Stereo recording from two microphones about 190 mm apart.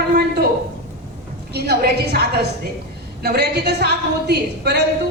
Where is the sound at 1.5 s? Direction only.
55° right (ahead or behind).